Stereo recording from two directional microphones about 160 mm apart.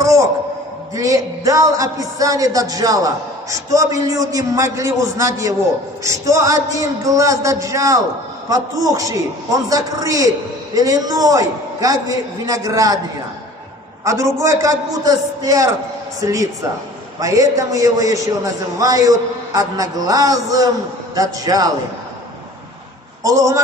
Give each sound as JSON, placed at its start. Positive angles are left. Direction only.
{"t": 0.0, "sound": "a sound", "side_deg": -20}
{"t": 0.9, "sound": "a man's voice", "side_deg": -20}
{"t": 14.0, "sound": "a man's voice", "side_deg": -20}
{"t": 23.2, "sound": "a man's voice", "side_deg": -20}